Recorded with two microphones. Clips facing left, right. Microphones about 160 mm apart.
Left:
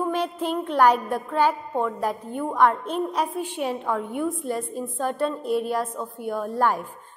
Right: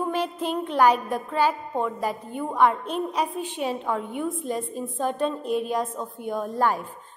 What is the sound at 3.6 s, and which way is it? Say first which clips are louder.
A woman's voice: even; 10° right (ahead or behind).